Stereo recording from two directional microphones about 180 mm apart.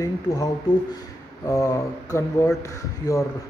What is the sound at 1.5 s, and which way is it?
Speech, 20° left (ahead or behind).